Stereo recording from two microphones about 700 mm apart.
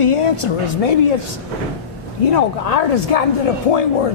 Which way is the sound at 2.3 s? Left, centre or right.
Left.